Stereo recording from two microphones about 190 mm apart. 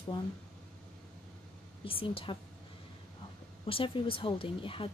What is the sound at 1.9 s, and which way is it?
Speech, 30° left (ahead or behind).